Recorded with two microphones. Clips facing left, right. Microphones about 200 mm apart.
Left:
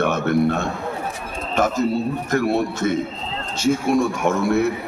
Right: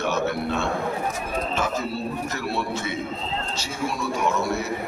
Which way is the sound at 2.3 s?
50° left (ahead or behind).